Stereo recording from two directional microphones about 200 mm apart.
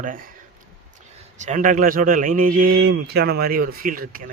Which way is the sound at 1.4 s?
40° right (ahead or behind).